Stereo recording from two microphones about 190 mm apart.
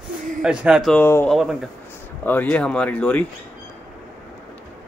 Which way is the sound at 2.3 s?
10° left (ahead or behind).